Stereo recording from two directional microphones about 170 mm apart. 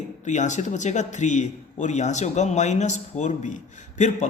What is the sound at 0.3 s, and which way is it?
Speech, 45° left (ahead or behind).